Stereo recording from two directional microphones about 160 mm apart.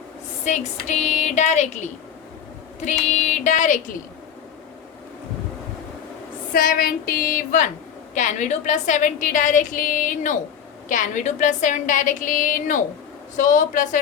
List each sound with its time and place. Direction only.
0.4 s a woman's voice: 45° left (ahead or behind)
2.8 s a woman's voice: 45° left (ahead or behind)
6.5 s a sound: 65° left (ahead or behind)
8.1 s a woman's voice: 50° left (ahead or behind)